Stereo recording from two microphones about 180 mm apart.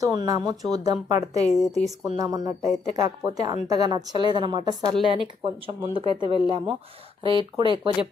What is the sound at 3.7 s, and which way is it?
A woman's voice, 20° right (ahead or behind).